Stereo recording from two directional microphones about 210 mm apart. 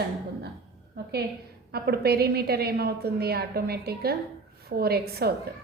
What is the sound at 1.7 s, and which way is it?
A woman's voice, 50° right (ahead or behind).